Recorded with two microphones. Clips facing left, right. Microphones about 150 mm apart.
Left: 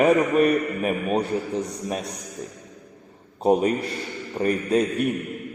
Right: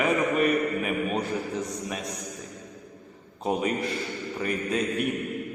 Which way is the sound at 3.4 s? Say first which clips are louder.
Left 7 dB; 35° left (ahead or behind).